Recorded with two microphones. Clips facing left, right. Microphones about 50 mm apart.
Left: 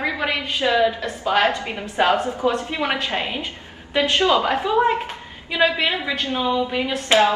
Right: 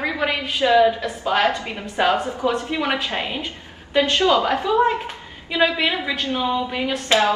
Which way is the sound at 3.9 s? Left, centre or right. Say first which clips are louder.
Right 1 dB; left.